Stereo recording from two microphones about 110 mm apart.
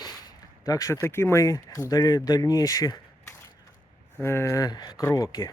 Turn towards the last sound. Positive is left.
turn(degrees=30)  # may be behind; listen again after turning